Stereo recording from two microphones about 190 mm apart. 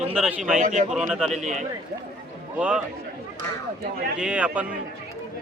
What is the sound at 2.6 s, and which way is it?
Speech, 5° right (ahead or behind).